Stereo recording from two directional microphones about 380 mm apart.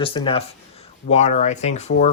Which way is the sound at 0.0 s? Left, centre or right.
Centre.